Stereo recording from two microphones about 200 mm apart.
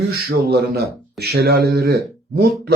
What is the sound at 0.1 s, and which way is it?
Speech, 50° right (ahead or behind).